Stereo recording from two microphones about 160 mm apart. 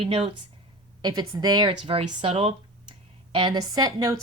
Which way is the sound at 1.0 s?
25° right (ahead or behind).